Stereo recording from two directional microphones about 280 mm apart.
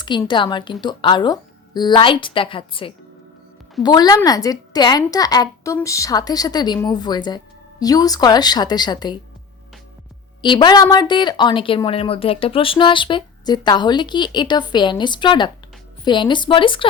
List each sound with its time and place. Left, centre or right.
0.0 s a woman's voice: centre
10.4 s a woman's voice: centre